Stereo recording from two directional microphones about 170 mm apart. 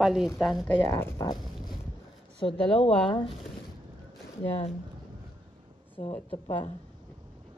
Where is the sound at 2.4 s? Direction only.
25° left (ahead or behind).